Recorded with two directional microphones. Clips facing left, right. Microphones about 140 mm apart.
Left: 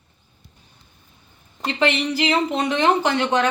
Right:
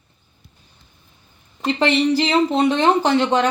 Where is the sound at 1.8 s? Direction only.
30° right (ahead or behind).